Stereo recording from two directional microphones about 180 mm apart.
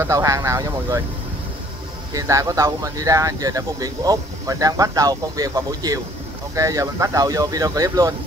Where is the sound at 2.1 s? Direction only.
20° right (ahead or behind).